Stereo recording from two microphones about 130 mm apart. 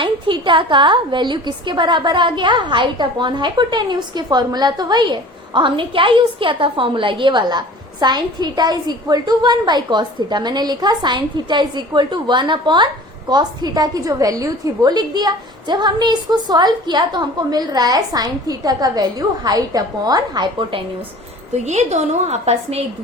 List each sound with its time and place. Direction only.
0.0 s a woman's voice: 40° right (ahead or behind)
21.5 s a woman's voice: 60° right (ahead or behind)